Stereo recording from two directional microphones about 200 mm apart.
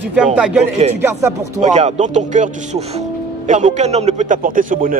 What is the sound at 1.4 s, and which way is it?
A man's voice, 35° right (ahead or behind).